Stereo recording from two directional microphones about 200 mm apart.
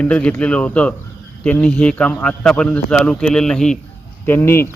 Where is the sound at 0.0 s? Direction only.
5° left (ahead or behind).